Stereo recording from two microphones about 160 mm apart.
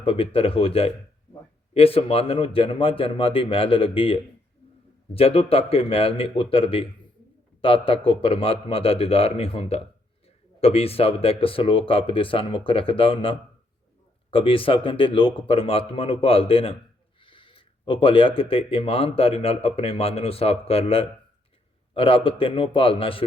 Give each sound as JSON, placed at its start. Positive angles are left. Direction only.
{"t": 0.0, "sound": "speech", "side_deg": 35}